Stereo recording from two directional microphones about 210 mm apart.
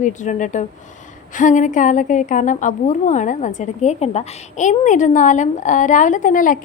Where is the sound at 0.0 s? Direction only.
35° left (ahead or behind).